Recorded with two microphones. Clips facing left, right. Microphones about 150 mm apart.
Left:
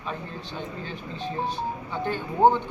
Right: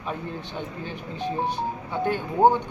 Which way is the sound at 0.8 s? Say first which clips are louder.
Right 3 dB; 15° right (ahead or behind).